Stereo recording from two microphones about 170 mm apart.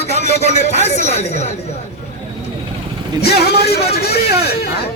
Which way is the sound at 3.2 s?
70° left (ahead or behind).